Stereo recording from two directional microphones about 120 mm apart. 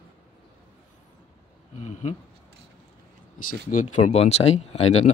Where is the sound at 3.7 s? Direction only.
90° left; by 5.1 s 65° left (ahead or behind).